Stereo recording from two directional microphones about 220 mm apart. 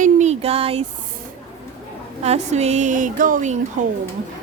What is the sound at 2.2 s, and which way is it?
Speech, 30° right (ahead or behind).